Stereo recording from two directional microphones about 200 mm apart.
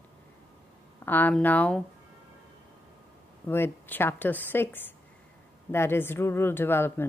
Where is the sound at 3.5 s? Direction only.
10° left (ahead or behind).